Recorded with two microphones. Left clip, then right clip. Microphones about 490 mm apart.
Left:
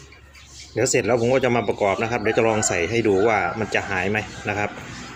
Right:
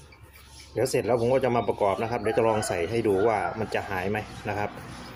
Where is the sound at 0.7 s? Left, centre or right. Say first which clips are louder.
Left 5 dB; right.